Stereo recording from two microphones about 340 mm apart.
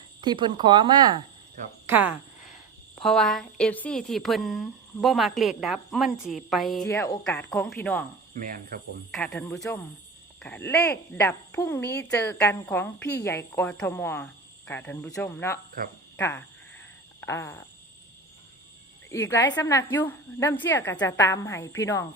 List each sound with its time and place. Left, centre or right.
0.2 s a woman's voice: centre
8.3 s speech: right
9.1 s a woman's voice: centre
17.2 s a sound: centre
19.1 s speech: centre